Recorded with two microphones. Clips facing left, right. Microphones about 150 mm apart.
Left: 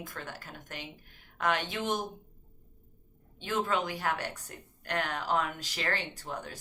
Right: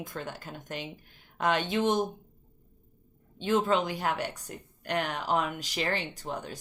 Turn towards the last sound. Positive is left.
turn(degrees=-20)  # may be behind; listen again after turning